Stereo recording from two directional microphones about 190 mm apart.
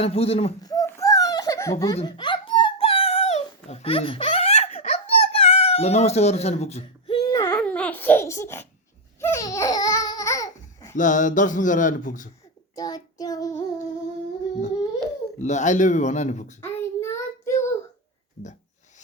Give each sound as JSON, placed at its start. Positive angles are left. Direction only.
{"t": 0.0, "sound": "speech", "side_deg": 30}
{"t": 0.6, "sound": "a sound", "side_deg": 20}
{"t": 7.3, "sound": "a sound", "side_deg": 20}
{"t": 7.5, "sound": "babbling", "side_deg": 5}
{"t": 10.9, "sound": "speech", "side_deg": 40}
{"t": 12.7, "sound": "child singing", "side_deg": 20}
{"t": 15.4, "sound": "speech", "side_deg": 40}
{"t": 16.6, "sound": "child singing", "side_deg": 15}